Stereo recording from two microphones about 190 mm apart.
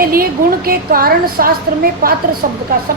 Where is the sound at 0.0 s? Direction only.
50° right (ahead or behind).